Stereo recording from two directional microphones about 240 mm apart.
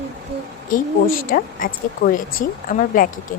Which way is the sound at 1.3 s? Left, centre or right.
Left.